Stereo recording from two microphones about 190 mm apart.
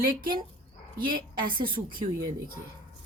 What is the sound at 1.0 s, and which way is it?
A woman's voice, 50° right (ahead or behind).